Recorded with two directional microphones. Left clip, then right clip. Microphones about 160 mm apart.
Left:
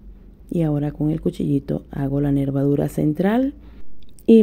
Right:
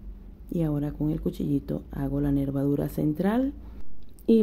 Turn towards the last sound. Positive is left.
turn(degrees=35)  # may be behind; listen again after turning